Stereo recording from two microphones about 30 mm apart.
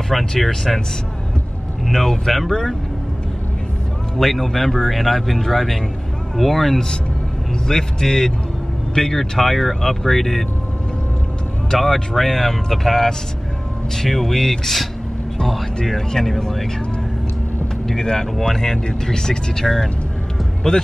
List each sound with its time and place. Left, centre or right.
0.1 s speech: centre
1.9 s speech: centre
4.2 s speech: centre
7.6 s speech: centre
11.7 s speech: centre
15.8 s speech: centre
18.0 s speech: left